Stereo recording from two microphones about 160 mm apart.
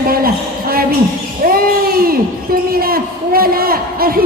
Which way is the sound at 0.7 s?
65° right (ahead or behind).